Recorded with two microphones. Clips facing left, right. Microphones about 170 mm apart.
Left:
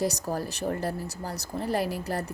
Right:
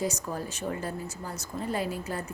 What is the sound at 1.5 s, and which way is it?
Speech, 75° left (ahead or behind).